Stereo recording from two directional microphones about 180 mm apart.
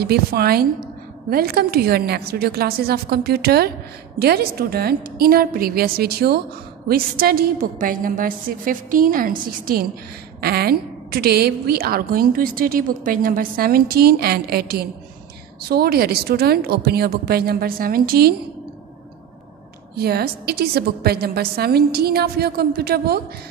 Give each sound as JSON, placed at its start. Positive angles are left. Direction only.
{"t": 0.0, "sound": "a woman's voice", "side_deg": -60}
{"t": 20.0, "sound": "a woman's voice", "side_deg": -60}